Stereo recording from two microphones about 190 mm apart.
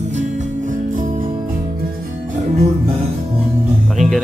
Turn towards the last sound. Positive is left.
turn(degrees=0)  # may be behind; listen again after turning